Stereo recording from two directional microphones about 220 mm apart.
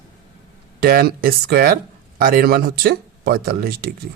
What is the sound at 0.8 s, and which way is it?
Speech, 40° right (ahead or behind).